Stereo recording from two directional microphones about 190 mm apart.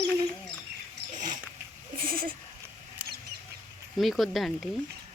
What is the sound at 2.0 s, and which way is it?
Bleat, 50° right (ahead or behind).